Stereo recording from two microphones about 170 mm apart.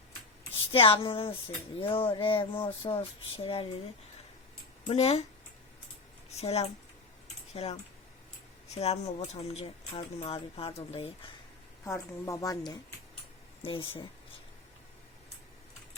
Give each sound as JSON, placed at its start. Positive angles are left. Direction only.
{"t": 0.7, "sound": "speech", "side_deg": 30}
{"t": 4.9, "sound": "speech", "side_deg": 40}
{"t": 6.3, "sound": "speech", "side_deg": 40}
{"t": 11.9, "sound": "a woman's voice", "side_deg": 15}